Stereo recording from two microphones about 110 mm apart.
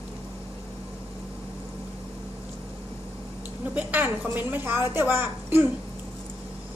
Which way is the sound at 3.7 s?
15° right (ahead or behind).